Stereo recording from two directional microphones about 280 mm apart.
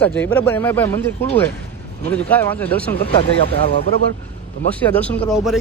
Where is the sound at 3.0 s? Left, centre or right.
Centre.